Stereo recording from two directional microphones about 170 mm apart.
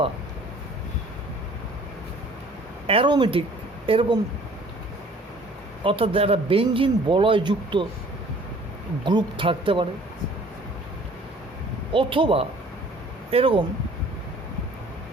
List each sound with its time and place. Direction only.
2.8 s speech: 35° right (ahead or behind)
5.8 s speech: 30° right (ahead or behind)
9.0 s speech: 30° right (ahead or behind)
11.9 s speech: 30° right (ahead or behind)